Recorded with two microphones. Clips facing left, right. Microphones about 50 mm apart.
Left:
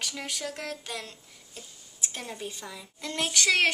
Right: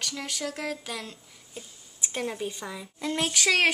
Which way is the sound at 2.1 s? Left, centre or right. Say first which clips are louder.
Right 7 dB; right.